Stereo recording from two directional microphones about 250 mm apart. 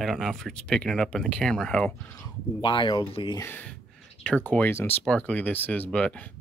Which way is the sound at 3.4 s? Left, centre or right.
Centre.